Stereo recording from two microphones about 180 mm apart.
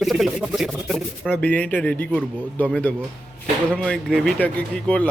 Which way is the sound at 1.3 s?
10° left (ahead or behind).